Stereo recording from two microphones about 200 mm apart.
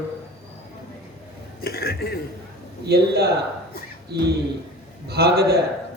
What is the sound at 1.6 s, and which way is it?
Speech, 50° left (ahead or behind).